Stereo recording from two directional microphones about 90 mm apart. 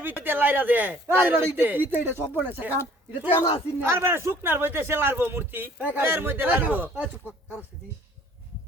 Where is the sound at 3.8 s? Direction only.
30° right (ahead or behind).